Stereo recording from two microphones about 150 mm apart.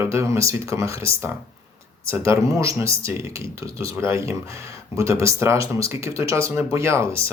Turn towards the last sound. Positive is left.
turn(degrees=-20)  # may be behind; listen again after turning